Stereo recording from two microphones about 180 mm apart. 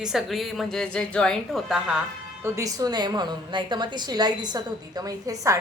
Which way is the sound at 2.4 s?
20° right (ahead or behind).